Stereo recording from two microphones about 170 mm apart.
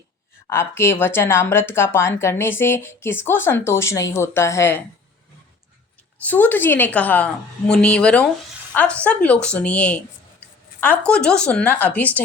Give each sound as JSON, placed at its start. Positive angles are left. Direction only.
{"t": 0.5, "sound": "speech", "side_deg": 15}
{"t": 6.1, "sound": "a woman's voice", "side_deg": 10}